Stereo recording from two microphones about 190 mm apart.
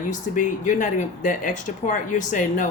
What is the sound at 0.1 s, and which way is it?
Speech, 40° left (ahead or behind).